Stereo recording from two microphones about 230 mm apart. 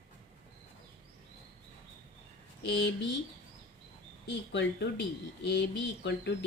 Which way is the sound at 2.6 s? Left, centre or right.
Left.